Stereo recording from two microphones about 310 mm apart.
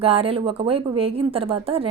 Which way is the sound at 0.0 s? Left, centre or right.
Centre.